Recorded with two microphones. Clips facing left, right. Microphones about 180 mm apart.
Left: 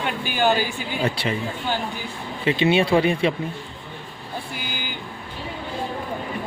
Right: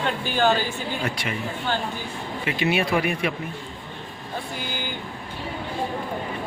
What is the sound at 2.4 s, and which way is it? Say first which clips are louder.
Speech: left 5 dB; 25° left (ahead or behind).